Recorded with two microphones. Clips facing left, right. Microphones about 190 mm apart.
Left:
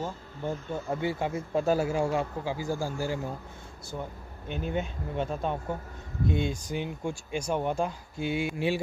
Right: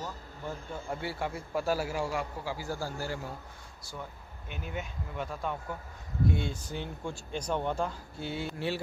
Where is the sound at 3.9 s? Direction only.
25° left (ahead or behind).